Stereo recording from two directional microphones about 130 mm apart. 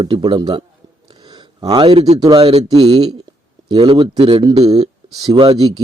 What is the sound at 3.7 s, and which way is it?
Speech, 40° right (ahead or behind).